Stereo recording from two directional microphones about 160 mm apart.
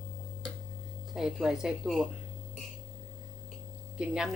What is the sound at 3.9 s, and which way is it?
Speech, 5° right (ahead or behind).